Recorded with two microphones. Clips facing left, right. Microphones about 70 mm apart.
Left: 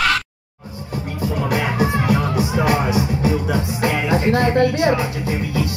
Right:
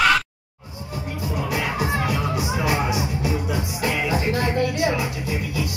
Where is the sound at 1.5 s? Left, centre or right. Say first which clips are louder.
Left 4 dB; left.